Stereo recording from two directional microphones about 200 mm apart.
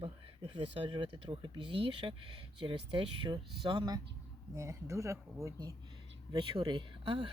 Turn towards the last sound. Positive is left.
turn(degrees=-25)  # may be behind; listen again after turning